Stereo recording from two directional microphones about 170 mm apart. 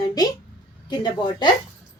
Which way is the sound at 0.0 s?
20° left (ahead or behind).